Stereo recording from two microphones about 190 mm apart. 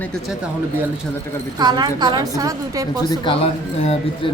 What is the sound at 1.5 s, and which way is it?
A woman's voice, 20° right (ahead or behind).